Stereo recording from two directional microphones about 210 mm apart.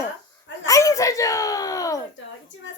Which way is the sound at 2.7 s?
60° left (ahead or behind).